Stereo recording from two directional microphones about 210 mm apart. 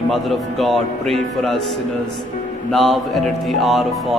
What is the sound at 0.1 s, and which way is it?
Speech, centre (ahead or behind).